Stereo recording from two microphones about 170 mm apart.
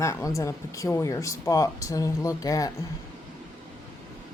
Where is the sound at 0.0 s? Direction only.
15° left (ahead or behind).